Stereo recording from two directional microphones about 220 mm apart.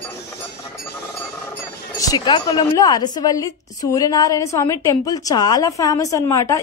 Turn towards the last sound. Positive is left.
turn(degrees=15)  # may be behind; listen again after turning